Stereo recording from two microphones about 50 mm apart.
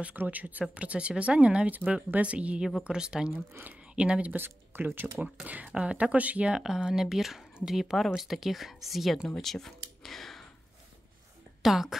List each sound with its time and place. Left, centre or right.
0.1 s speech: right; by 4.3 s centre
4.3 s speech: right
5.2 s speech: right
6.5 s speech: centre
11.6 s speech: centre